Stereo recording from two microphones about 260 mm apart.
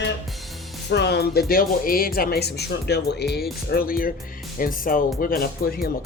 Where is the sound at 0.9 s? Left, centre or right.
Left.